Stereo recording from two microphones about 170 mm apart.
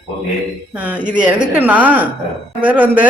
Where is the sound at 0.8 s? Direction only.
5° right (ahead or behind).